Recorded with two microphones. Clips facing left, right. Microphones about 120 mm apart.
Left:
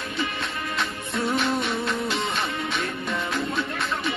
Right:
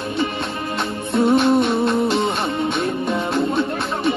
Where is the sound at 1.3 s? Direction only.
55° right (ahead or behind).